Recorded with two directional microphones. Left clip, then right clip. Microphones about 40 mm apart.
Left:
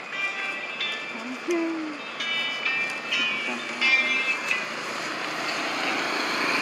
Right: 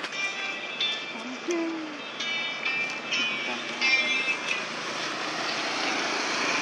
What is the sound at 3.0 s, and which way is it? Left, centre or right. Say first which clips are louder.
Vehicle: left 2 dB; left.